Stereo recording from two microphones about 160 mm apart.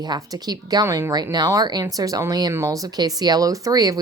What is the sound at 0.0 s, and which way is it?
Speech, 25° right (ahead or behind).